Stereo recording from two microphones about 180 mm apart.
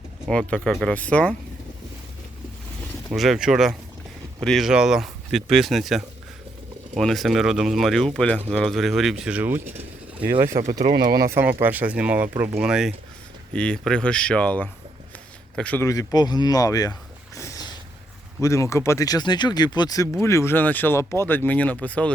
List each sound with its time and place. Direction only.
0.3 s speech: 5° left (ahead or behind)
3.1 s speech: centre (ahead or behind)
10.4 s speech: 45° right (ahead or behind)
11.2 s speech: 15° right (ahead or behind); by 22.1 s 5° left (ahead or behind)